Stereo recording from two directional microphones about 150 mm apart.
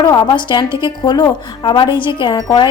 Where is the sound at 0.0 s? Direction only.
30° left (ahead or behind).